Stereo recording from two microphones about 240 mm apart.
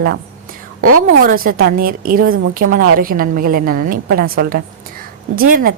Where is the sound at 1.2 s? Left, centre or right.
Right.